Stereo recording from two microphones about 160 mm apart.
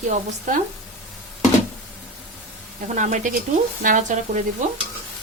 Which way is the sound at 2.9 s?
50° right (ahead or behind).